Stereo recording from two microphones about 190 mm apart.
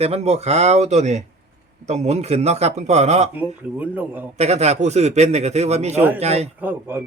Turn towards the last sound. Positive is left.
turn(degrees=-10)  # may be behind; listen again after turning